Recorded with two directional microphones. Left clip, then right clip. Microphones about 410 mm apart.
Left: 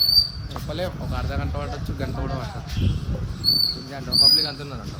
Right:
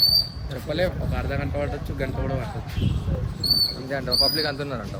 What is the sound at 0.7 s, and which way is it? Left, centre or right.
Speech, centre.